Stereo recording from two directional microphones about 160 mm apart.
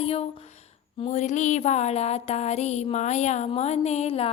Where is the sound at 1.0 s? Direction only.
50° left (ahead or behind).